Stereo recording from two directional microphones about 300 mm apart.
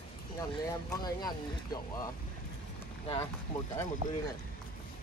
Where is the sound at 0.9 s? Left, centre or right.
Centre.